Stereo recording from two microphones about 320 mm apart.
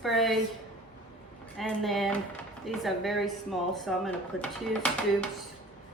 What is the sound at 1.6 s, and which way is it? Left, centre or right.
Speech, centre.